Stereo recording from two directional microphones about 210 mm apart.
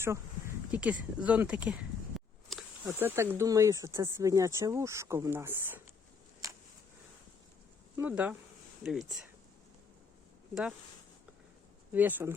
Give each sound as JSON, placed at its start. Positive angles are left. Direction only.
{"t": 0.0, "sound": "a sound", "side_deg": -10}
{"t": 2.8, "sound": "speech", "side_deg": -10}
{"t": 6.4, "sound": "a sound", "side_deg": -15}
{"t": 7.9, "sound": "speech", "side_deg": -5}
{"t": 10.5, "sound": "speech", "side_deg": -5}
{"t": 11.9, "sound": "speech", "side_deg": -10}